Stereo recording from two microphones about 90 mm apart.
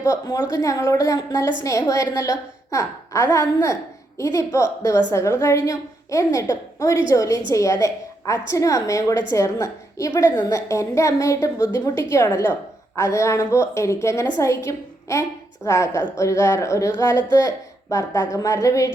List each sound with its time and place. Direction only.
0.0 s a woman's voice: 35° left (ahead or behind)